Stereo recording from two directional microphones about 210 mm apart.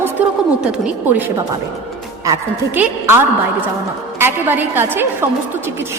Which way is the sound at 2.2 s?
10° right (ahead or behind).